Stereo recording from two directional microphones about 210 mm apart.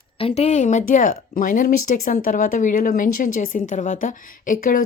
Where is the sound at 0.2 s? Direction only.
30° left (ahead or behind).